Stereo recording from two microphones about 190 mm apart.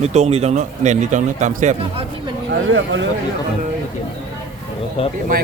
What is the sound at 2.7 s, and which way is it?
Speech, 90° right.